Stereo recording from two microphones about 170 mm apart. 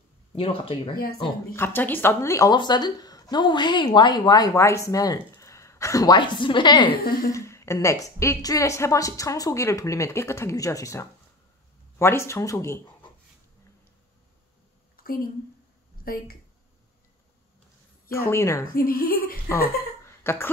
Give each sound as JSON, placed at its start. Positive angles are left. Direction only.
{"t": 0.4, "sound": "speech", "side_deg": 35}
{"t": 1.1, "sound": "speech", "side_deg": 20}
{"t": 7.3, "sound": "a woman's voice", "side_deg": 15}
{"t": 16.0, "sound": "speech", "side_deg": 60}
{"t": 18.1, "sound": "a woman's voice", "side_deg": 15}
{"t": 18.8, "sound": "a woman's voice", "side_deg": 60}
{"t": 20.2, "sound": "a woman's voice", "side_deg": 15}